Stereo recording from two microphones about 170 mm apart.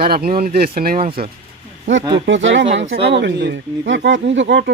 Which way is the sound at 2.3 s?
90° right.